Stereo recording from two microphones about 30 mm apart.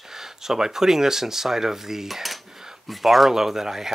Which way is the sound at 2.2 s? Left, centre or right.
Centre.